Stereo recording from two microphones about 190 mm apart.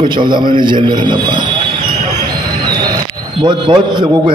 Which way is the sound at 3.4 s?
25° right (ahead or behind).